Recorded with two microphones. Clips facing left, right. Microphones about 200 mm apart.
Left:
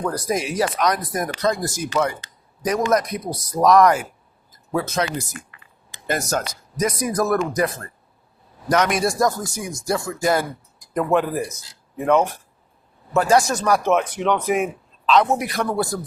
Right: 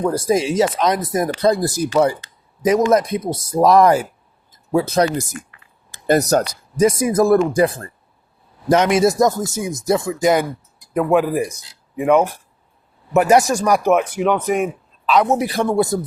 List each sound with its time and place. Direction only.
0.0 s speech: 25° right (ahead or behind)
4.5 s a sound: 25° right (ahead or behind)
6.1 s speech: 40° right (ahead or behind); by 10.4 s 20° right (ahead or behind)
10.9 s speech: 10° right (ahead or behind)
15.3 s speech: 30° right (ahead or behind)